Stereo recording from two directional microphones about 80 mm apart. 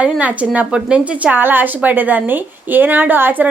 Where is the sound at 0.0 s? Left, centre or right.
Centre.